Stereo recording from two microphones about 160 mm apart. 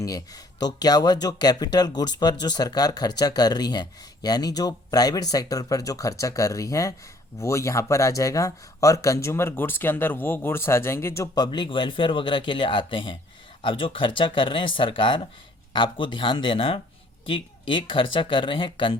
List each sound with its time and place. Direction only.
0.0 s speech: 25° left (ahead or behind)